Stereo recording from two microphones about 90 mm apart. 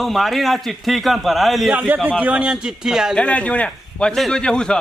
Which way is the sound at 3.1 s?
15° left (ahead or behind).